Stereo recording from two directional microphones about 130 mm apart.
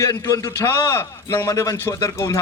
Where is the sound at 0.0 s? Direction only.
25° left (ahead or behind).